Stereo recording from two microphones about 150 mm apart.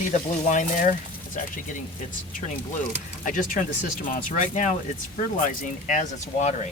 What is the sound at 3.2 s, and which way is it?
Speech, 65° left (ahead or behind).